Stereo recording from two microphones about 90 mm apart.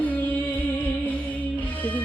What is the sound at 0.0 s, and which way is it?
Music, 15° left (ahead or behind).